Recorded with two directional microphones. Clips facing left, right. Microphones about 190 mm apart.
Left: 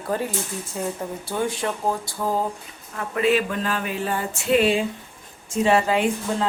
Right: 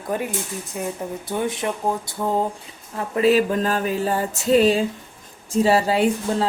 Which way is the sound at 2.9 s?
35° right (ahead or behind).